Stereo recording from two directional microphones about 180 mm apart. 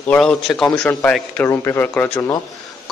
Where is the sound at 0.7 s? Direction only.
15° left (ahead or behind).